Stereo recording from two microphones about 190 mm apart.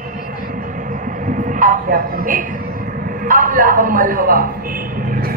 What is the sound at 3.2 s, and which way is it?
A man's voice, 45° right (ahead or behind).